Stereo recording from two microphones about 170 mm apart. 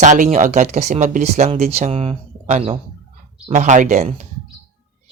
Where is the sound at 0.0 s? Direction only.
45° right (ahead or behind).